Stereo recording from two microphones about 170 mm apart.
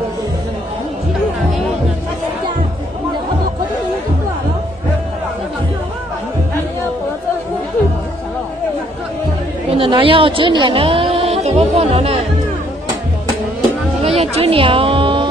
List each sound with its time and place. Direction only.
9.7 s a woman's voice: 30° right (ahead or behind)
14.0 s speech: 35° right (ahead or behind)